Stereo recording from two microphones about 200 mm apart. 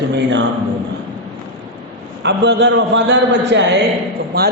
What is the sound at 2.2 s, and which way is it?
A man's voice, 60° right (ahead or behind).